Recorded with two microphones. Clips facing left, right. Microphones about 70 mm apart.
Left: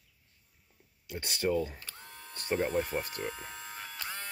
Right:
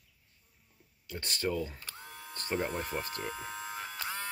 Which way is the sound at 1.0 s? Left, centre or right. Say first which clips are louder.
Left 3 dB; centre.